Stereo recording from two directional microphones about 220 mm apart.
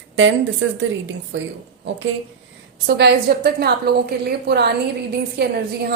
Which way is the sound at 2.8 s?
45° right (ahead or behind).